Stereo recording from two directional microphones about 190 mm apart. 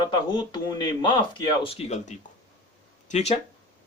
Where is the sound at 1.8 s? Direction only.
35° left (ahead or behind).